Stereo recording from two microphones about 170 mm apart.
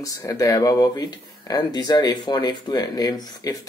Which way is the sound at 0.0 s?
20° left (ahead or behind).